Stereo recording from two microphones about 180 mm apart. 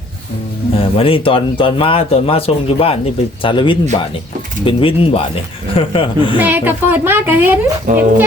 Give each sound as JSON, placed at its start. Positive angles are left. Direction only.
{"t": 0.7, "sound": "speech", "side_deg": 30}
{"t": 6.3, "sound": "a woman's voice", "side_deg": -10}
{"t": 7.9, "sound": "speech", "side_deg": -45}